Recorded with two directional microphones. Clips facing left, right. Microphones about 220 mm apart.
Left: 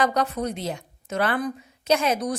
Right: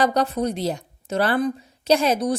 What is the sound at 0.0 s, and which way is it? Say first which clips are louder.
Speech: right 3 dB; 35° right (ahead or behind).